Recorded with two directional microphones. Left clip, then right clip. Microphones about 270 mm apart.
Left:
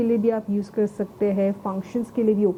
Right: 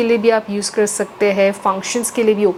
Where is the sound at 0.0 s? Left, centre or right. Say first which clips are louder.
Right 8 dB; centre.